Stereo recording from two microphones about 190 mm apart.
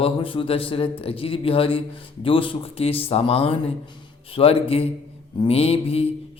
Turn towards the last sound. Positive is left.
turn(degrees=30)  # may be behind; listen again after turning